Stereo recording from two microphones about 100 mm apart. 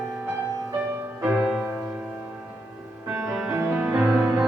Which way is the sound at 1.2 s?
10° right (ahead or behind).